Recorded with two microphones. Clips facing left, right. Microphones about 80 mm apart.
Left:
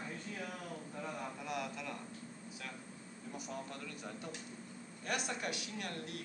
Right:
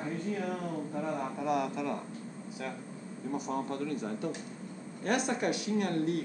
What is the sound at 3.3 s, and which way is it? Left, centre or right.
Speech, right.